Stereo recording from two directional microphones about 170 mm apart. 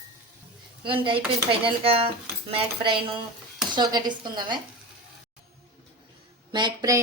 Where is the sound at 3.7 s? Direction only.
25° right (ahead or behind).